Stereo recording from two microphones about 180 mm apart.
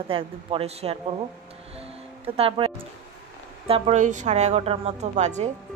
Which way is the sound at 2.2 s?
30° right (ahead or behind).